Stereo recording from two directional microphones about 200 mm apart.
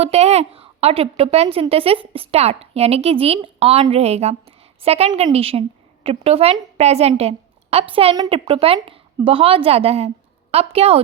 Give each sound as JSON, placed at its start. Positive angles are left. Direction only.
{"t": 0.0, "sound": "a woman's voice", "side_deg": -30}